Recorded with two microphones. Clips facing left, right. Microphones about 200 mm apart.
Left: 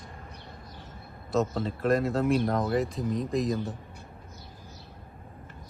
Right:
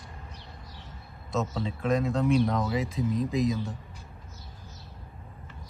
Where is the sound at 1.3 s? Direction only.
Centre (ahead or behind).